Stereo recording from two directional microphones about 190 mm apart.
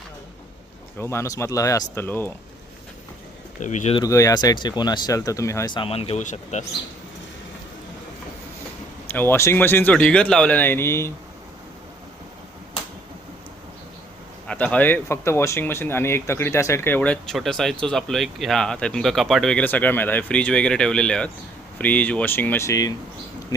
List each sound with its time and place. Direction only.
0.9 s speech: 15° left (ahead or behind)
3.6 s speech: 40° left (ahead or behind)
4.0 s speech: 15° left (ahead or behind); by 6.7 s 40° left (ahead or behind)
9.1 s speech: 15° left (ahead or behind)
14.4 s speech: 5° left (ahead or behind)
23.5 s a sound: 20° left (ahead or behind)